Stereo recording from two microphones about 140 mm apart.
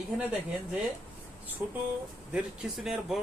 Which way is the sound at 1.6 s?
10° right (ahead or behind).